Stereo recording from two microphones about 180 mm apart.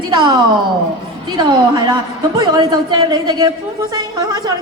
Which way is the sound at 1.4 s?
25° right (ahead or behind).